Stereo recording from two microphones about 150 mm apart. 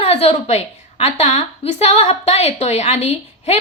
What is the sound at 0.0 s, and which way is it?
A woman's voice, 40° left (ahead or behind).